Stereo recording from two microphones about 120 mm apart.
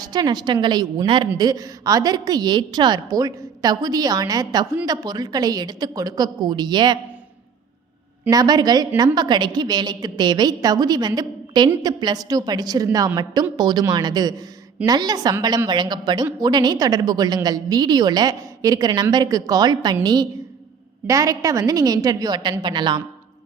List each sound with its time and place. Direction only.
0.0 s a woman's voice: 35° right (ahead or behind)
1.4 s a woman's voice: 30° right (ahead or behind)
8.3 s a woman's voice: 35° right (ahead or behind)